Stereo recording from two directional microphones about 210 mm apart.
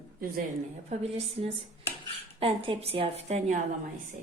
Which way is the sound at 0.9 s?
30° right (ahead or behind).